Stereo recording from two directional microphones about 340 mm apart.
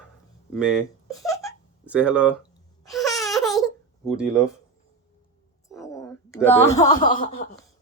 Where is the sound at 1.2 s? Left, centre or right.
Centre.